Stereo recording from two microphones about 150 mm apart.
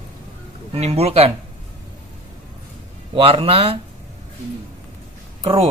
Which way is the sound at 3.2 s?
40° right (ahead or behind).